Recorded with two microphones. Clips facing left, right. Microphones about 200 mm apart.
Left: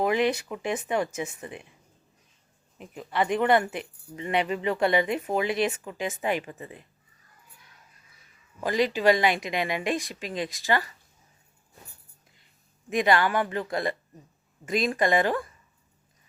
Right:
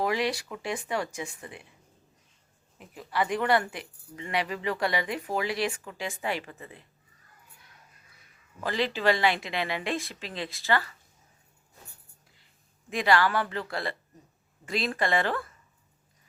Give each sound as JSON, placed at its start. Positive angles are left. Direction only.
{"t": 0.0, "sound": "speech", "side_deg": 20}
{"t": 2.7, "sound": "speech", "side_deg": 20}
{"t": 8.6, "sound": "a woman's voice", "side_deg": 15}
{"t": 12.9, "sound": "a woman's voice", "side_deg": 20}